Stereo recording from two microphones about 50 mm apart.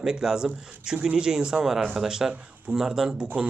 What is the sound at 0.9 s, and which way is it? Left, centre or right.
Speech, right.